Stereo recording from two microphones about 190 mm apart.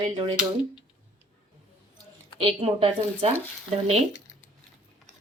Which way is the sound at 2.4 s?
30° right (ahead or behind).